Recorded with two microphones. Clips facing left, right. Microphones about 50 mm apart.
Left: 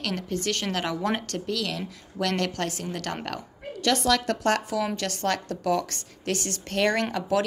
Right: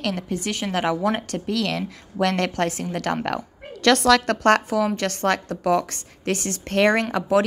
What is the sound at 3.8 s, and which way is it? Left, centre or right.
Speech, right.